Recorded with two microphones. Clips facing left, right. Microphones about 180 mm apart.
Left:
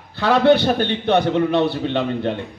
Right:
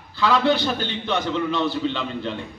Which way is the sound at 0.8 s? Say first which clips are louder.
Left 8 dB; 60° left (ahead or behind).